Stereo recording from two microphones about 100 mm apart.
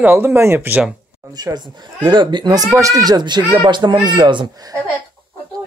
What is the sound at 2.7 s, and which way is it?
Speech, 35° right (ahead or behind).